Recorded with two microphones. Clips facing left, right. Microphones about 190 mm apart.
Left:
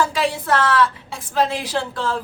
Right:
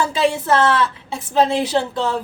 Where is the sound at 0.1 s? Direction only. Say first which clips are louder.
Right 3 dB; 25° right (ahead or behind).